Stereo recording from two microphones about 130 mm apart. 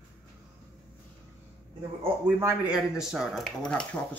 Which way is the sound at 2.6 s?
5° right (ahead or behind).